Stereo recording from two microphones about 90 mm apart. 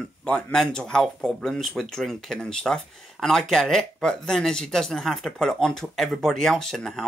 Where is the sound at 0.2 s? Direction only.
10° left (ahead or behind).